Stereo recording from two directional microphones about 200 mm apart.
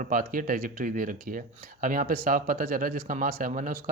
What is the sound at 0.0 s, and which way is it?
Speech, 45° right (ahead or behind).